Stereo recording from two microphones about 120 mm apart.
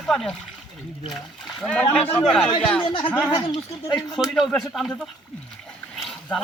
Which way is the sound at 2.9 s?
45° left (ahead or behind).